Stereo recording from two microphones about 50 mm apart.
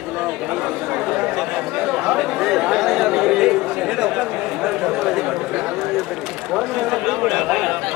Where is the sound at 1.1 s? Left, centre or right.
Centre.